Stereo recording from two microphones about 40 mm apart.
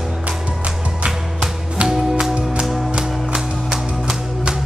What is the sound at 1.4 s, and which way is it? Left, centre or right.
Music, centre.